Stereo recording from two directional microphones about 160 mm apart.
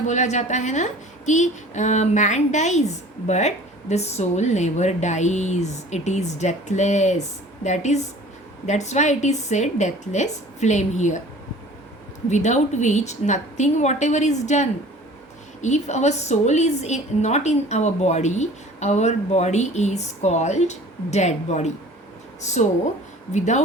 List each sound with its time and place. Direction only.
0.1 s a woman's voice: 45° left (ahead or behind)
12.3 s a woman's voice: 45° left (ahead or behind)